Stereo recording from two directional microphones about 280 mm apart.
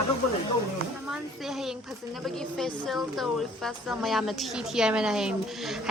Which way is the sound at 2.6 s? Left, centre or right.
Centre.